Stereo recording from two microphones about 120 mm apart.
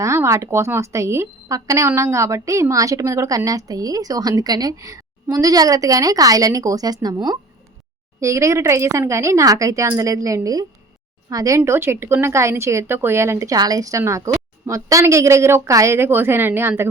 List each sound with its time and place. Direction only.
0.0 s a woman's voice: 25° right (ahead or behind)